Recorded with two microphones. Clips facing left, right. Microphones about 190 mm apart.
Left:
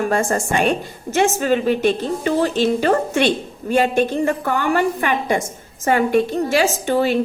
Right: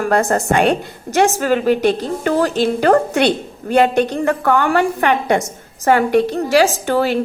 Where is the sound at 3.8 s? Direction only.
65° right (ahead or behind).